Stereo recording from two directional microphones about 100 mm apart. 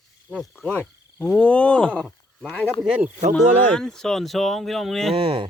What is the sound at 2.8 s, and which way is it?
Speech, 15° right (ahead or behind).